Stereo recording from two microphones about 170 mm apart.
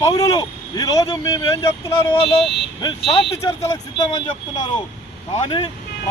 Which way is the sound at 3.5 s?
25° left (ahead or behind).